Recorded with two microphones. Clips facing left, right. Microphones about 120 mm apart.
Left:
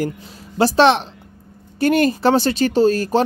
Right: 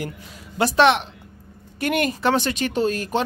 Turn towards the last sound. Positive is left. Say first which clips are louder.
# left 7 dB
turn(degrees=35)  # may be behind; listen again after turning